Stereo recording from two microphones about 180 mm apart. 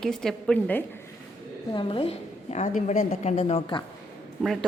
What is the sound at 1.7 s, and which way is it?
A woman's voice, 30° left (ahead or behind).